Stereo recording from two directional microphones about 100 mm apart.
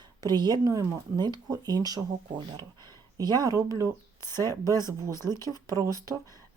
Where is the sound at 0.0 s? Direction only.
45° right (ahead or behind).